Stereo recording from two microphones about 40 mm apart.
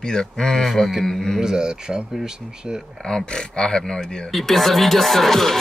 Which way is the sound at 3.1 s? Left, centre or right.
Centre.